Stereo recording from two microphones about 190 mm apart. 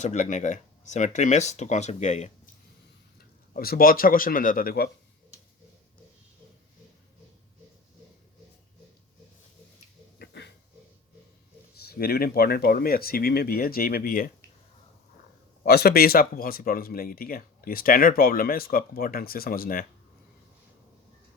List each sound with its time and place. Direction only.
0.0 s speech: 40° left (ahead or behind)
3.5 s speech: 50° left (ahead or behind)
10.2 s a sound: 65° left (ahead or behind)
11.8 s speech: 55° left (ahead or behind)
15.6 s speech: 55° left (ahead or behind)